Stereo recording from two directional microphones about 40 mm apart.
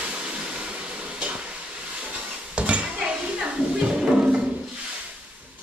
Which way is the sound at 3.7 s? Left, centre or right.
Centre.